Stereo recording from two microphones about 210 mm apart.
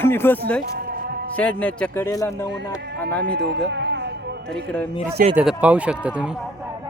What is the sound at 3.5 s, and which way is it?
Speech, 55° right (ahead or behind).